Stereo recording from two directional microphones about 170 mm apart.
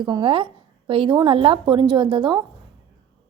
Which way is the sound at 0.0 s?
30° right (ahead or behind).